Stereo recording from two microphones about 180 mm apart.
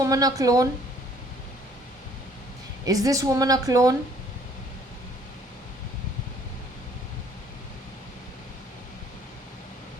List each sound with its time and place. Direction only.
0.0 s a woman's voice: 20° right (ahead or behind)
2.8 s a woman's voice: 20° right (ahead or behind)